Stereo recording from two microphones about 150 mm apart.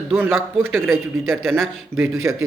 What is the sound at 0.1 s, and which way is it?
Speech, 15° right (ahead or behind).